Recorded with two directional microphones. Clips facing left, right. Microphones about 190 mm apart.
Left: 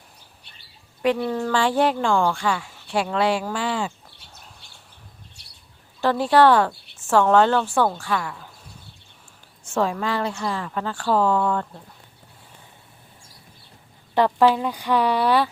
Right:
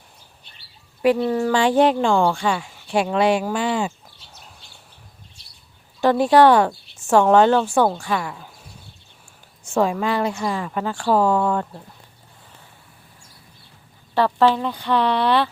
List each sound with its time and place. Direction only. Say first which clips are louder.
1.0 s speech: right 4 dB; 5° right (ahead or behind)
6.0 s speech: right 3 dB; 15° right (ahead or behind)
9.7 s speech: right 3 dB; 15° right (ahead or behind)
14.2 s speech: even; 10° left (ahead or behind)